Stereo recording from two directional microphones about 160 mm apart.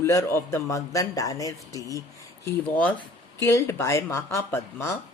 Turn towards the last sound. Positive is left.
turn(degrees=15)  # may be behind; listen again after turning